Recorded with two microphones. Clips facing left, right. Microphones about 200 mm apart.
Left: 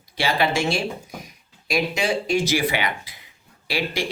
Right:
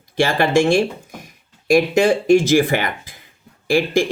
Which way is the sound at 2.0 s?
50° right (ahead or behind).